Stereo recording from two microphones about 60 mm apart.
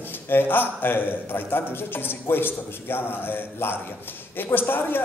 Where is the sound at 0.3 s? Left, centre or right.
Left.